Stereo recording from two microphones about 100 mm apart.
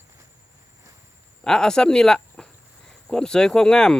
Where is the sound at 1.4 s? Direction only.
5° left (ahead or behind).